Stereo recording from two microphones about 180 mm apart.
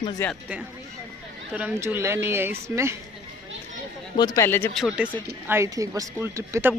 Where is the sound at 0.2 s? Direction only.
10° left (ahead or behind).